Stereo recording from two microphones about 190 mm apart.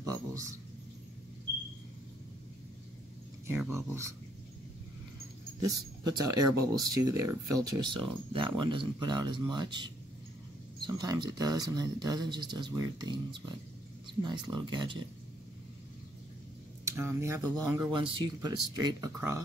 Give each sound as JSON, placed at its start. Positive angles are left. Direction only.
{"t": 0.0, "sound": "a sound", "side_deg": -15}
{"t": 3.4, "sound": "speech", "side_deg": -10}
{"t": 5.6, "sound": "speech", "side_deg": -20}
{"t": 16.8, "sound": "speech", "side_deg": -15}
{"t": 17.7, "sound": "speech", "side_deg": -25}